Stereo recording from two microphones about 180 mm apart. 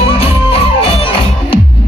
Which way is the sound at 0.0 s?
30° left (ahead or behind).